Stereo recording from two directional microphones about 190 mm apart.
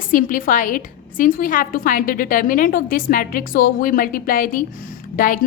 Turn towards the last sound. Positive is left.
turn(degrees=45)  # may be behind; listen again after turning